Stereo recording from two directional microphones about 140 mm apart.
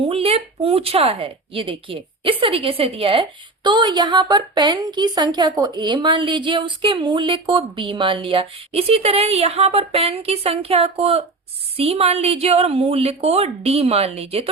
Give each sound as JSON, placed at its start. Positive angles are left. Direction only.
{"t": 0.1, "sound": "a woman's voice", "side_deg": -45}